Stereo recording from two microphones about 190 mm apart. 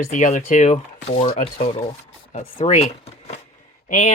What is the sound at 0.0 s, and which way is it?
Speech, 40° left (ahead or behind).